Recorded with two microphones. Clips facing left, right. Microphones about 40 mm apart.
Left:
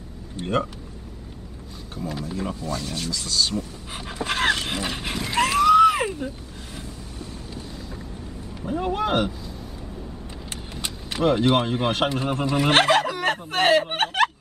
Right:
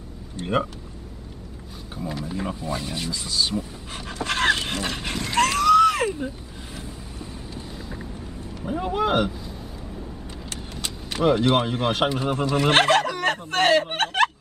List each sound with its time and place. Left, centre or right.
0.4 s speech: centre
2.2 s speech: centre
3.9 s dog: centre
8.8 s speech: centre
10.5 s vehicle: centre
11.2 s speech: centre